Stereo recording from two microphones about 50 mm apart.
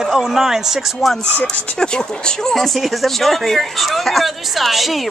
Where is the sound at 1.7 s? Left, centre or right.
Centre.